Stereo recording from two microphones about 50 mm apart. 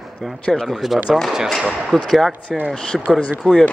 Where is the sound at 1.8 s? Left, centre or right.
Centre.